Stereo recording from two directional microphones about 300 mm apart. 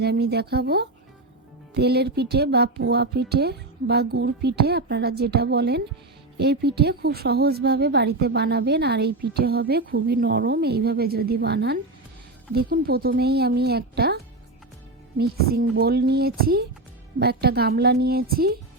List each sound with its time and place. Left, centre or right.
0.0 s a woman's voice: right
15.2 s a woman's voice: right